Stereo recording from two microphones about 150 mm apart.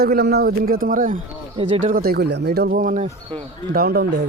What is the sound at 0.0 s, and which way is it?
A man's voice, 90° right.